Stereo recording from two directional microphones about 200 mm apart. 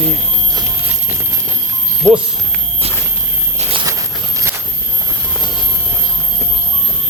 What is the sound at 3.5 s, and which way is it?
Walk, 30° right (ahead or behind).